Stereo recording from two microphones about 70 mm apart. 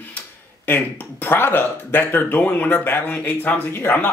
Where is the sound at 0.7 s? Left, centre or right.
Left.